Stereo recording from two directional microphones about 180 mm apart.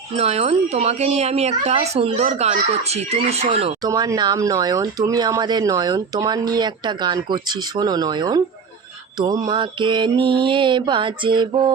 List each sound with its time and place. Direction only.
0.2 s speech: 35° right (ahead or behind)
3.8 s speech: 20° right (ahead or behind)